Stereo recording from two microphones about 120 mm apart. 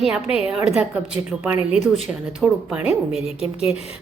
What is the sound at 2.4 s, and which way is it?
Speech, 10° right (ahead or behind).